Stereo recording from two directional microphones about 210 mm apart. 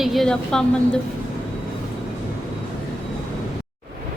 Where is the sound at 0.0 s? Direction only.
Centre (ahead or behind).